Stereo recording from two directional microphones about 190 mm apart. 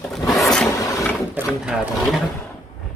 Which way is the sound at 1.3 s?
5° right (ahead or behind).